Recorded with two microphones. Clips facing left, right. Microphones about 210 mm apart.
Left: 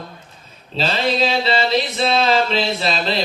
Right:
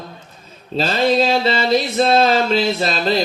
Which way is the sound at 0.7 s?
45° right (ahead or behind).